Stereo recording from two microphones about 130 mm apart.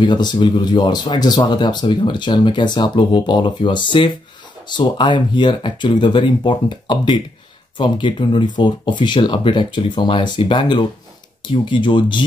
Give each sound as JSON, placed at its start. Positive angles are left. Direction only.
{"t": 0.0, "sound": "speech", "side_deg": 35}